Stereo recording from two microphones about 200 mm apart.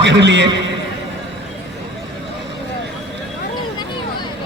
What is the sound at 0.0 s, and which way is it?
Speech, 60° right (ahead or behind).